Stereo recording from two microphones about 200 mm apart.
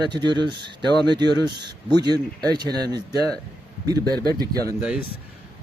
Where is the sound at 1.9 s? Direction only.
20° right (ahead or behind).